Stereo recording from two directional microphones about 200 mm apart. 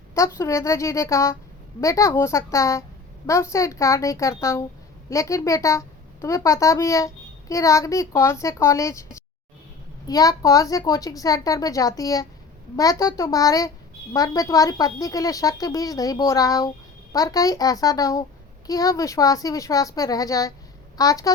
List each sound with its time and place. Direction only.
0.1 s a woman's voice: 15° left (ahead or behind)